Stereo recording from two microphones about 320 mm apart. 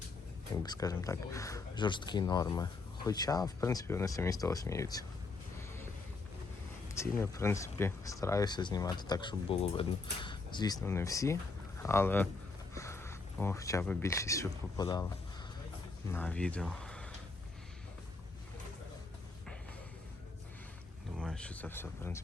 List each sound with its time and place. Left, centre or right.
0.5 s speech: centre
6.8 s speech: centre
16.1 s speech: centre
21.2 s speech: centre